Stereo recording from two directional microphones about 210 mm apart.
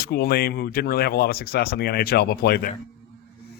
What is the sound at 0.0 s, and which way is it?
Speech, 45° left (ahead or behind).